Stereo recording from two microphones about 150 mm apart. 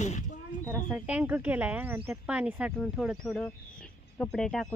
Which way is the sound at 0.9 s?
10° right (ahead or behind).